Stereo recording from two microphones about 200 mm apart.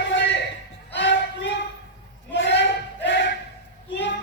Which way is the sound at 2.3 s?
60° left (ahead or behind).